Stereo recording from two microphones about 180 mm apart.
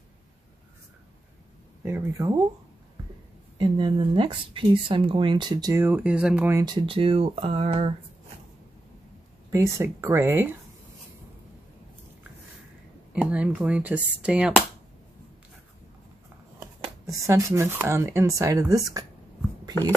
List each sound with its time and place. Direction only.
1.9 s speech: 15° right (ahead or behind)
3.5 s speech: 25° right (ahead or behind); by 6.6 s 10° right (ahead or behind)
6.6 s speech: 25° right (ahead or behind)
9.5 s speech: 15° right (ahead or behind)
13.1 s speech: 5° right (ahead or behind)
17.0 s speech: 15° right (ahead or behind)